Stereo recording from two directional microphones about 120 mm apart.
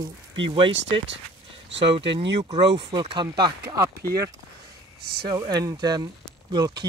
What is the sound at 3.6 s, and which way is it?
Speech, 25° right (ahead or behind).